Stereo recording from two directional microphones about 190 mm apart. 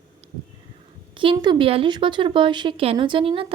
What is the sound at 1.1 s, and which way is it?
A woman's voice, 25° right (ahead or behind).